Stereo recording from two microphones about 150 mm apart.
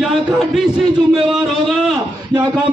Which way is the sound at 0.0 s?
Centre (ahead or behind).